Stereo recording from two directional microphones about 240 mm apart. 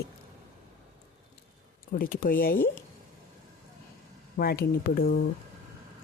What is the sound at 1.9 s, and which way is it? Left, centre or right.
Speech, left.